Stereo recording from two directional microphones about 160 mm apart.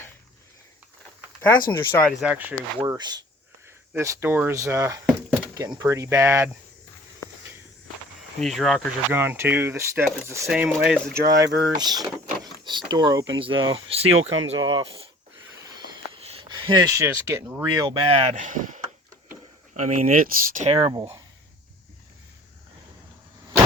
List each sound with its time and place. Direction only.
1.7 s speech: 15° left (ahead or behind)
2.2 s speech: 10° right (ahead or behind)
2.8 s speech: 25° right (ahead or behind)
8.4 s speech: centre (ahead or behind)
9.1 s speech: 15° right (ahead or behind)
10.5 s speech: 5° right (ahead or behind)
11.1 s speech: 20° right (ahead or behind)
16.2 s speech: 35° right (ahead or behind); by 17.7 s 15° right (ahead or behind)
17.7 s speech: 25° right (ahead or behind)
18.0 s speech: 40° right (ahead or behind)
18.3 s speech: 55° right (ahead or behind)
19.8 s speech: 60° right (ahead or behind)
20.7 s speech: 35° right (ahead or behind)